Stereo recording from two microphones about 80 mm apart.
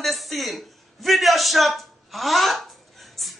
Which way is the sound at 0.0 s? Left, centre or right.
Centre.